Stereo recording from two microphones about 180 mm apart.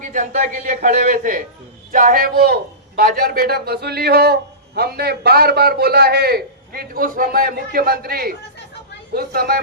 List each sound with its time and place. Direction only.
0.0 s a man's voice: 45° right (ahead or behind)